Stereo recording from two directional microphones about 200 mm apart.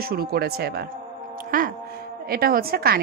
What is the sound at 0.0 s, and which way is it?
A woman's voice, 50° right (ahead or behind).